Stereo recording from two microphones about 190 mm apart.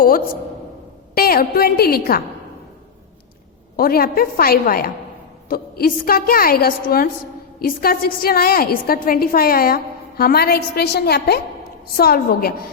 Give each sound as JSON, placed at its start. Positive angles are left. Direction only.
{"t": 1.1, "sound": "a woman's voice", "side_deg": 50}
{"t": 3.8, "sound": "a woman's voice", "side_deg": 50}